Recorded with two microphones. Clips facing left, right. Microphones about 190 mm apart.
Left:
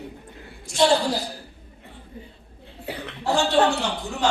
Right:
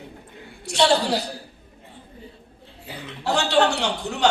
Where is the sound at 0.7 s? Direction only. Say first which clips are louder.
Even; 70° right (ahead or behind).